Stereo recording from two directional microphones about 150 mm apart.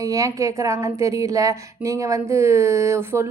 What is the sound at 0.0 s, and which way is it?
A woman's voice, 20° right (ahead or behind).